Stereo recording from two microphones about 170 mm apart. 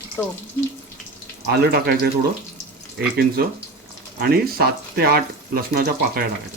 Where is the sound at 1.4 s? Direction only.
70° right (ahead or behind).